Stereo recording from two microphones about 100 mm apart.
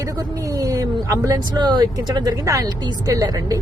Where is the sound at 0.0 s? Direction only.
35° right (ahead or behind).